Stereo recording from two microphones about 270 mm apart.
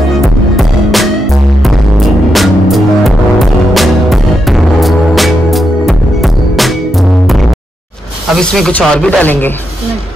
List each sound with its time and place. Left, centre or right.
1.6 s music: centre
8.4 s speech: centre